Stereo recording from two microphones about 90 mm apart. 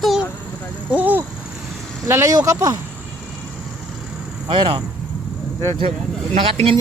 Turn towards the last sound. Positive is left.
turn(degrees=-90)